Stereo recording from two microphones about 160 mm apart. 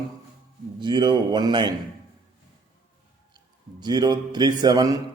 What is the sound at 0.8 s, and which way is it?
Speech, 25° right (ahead or behind).